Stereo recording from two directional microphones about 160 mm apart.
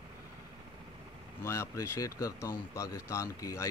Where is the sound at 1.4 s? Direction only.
20° left (ahead or behind).